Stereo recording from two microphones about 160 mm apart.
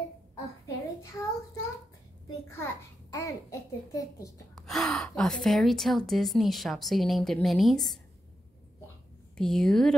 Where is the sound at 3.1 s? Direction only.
20° left (ahead or behind).